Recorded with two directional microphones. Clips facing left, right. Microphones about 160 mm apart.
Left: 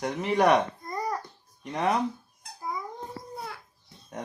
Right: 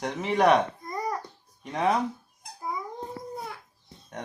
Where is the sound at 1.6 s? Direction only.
Centre (ahead or behind).